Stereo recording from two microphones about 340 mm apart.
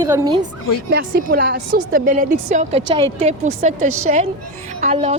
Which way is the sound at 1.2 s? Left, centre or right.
Right.